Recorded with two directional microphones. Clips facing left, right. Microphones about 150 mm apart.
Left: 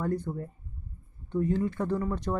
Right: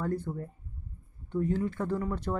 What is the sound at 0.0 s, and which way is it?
Speech, 15° left (ahead or behind).